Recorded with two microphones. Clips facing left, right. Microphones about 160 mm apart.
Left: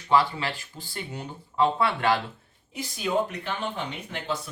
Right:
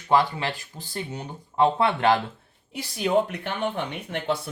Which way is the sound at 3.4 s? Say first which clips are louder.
Right 3 dB; 60° right (ahead or behind).